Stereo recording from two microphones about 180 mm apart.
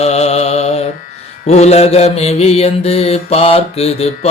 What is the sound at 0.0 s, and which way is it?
Mantra, 35° left (ahead or behind).